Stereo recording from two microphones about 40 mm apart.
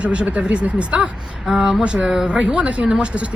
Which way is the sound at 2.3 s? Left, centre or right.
Right.